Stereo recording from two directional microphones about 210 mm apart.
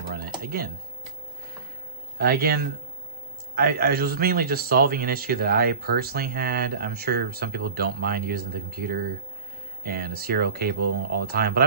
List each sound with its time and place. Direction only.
0.4 s speech: 45° right (ahead or behind)
2.1 s a man's voice: 45° right (ahead or behind)